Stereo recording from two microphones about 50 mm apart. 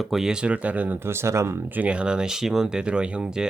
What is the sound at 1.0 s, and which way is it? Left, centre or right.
Speech, right.